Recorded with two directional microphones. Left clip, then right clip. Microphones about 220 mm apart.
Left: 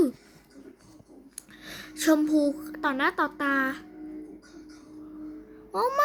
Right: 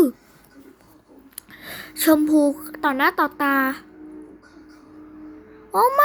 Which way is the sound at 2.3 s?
15° right (ahead or behind).